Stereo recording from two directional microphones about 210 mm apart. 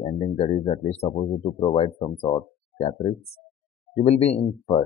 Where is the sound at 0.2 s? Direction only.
30° left (ahead or behind).